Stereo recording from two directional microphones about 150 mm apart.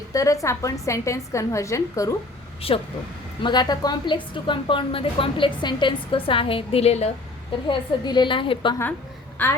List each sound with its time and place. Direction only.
0.1 s a woman's voice: 20° left (ahead or behind)
2.6 s a woman's voice: 40° left (ahead or behind)
3.4 s a woman's voice: 30° left (ahead or behind); by 7.1 s 45° left (ahead or behind)
7.7 s a woman's voice: 30° left (ahead or behind)
9.4 s a woman's voice: 10° left (ahead or behind)